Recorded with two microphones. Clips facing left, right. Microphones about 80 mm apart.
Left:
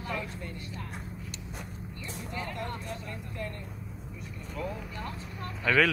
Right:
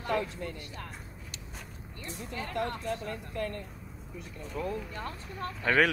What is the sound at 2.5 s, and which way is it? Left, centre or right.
Speech, right.